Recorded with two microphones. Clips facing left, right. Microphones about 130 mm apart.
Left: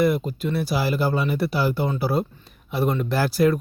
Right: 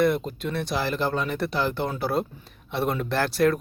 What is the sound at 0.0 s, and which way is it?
Speech, 5° left (ahead or behind).